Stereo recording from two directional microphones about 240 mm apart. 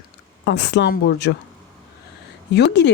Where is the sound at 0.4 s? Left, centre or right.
Left.